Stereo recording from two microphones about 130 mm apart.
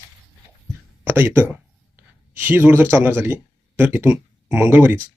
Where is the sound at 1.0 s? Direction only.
20° right (ahead or behind).